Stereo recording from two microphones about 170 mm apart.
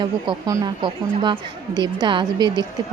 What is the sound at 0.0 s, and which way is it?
Speech, 25° right (ahead or behind).